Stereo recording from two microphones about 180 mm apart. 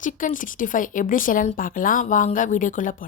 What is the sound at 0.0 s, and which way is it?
Speech, 50° left (ahead or behind).